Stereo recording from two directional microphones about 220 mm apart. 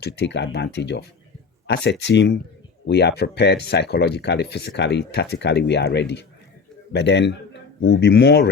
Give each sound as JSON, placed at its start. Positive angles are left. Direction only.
{"t": 0.0, "sound": "speech", "side_deg": 50}